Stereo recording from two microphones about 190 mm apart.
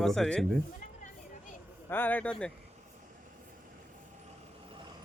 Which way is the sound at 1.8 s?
10° left (ahead or behind).